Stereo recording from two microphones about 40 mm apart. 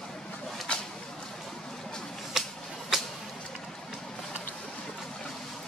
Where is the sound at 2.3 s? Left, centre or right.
Centre.